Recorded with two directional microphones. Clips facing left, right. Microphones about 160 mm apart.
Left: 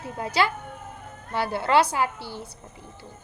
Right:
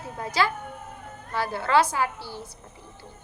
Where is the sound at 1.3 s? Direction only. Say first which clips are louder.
Left 1 dB; 30° left (ahead or behind).